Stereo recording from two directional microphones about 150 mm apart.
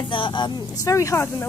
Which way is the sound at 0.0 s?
35° left (ahead or behind).